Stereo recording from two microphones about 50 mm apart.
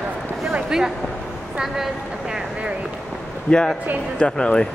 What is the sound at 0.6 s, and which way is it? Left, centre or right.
Speech, centre.